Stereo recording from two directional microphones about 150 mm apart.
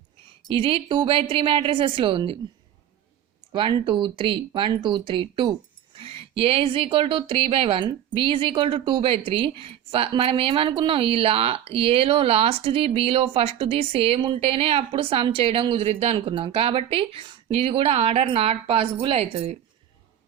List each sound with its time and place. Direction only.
0.4 s speech: 35° right (ahead or behind)
3.8 s speech: 30° right (ahead or behind)